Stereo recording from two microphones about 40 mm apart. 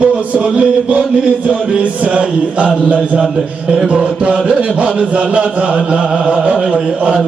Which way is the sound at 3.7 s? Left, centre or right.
Right.